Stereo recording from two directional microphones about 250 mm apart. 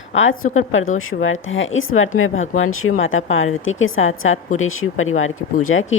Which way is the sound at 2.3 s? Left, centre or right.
Left.